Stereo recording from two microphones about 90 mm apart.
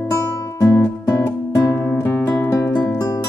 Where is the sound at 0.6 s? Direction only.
30° left (ahead or behind).